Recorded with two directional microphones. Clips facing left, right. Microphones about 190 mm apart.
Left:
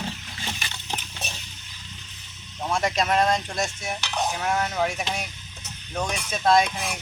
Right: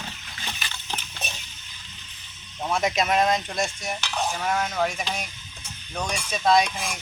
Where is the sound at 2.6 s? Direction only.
5° right (ahead or behind).